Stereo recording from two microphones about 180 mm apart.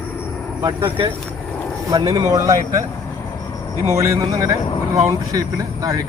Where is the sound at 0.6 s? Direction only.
30° right (ahead or behind).